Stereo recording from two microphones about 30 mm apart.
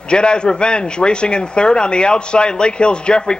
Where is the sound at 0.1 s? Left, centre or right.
Left.